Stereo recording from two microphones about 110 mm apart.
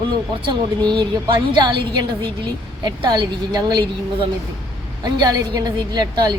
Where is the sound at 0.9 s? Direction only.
45° right (ahead or behind).